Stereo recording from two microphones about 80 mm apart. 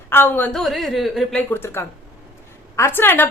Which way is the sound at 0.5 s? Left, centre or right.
Centre.